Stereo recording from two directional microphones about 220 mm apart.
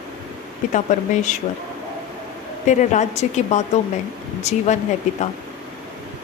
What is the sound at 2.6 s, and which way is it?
A woman's voice, 35° left (ahead or behind).